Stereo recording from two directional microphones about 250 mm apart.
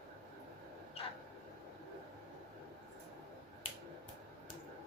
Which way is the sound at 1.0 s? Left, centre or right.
Left.